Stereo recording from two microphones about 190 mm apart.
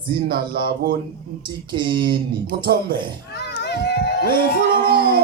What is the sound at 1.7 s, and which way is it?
Speech, 25° right (ahead or behind).